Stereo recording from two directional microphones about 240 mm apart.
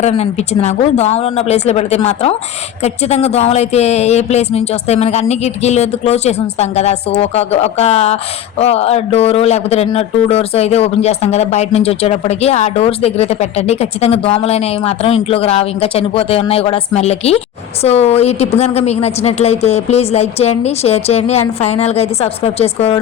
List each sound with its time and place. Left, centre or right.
0.0 s speech: left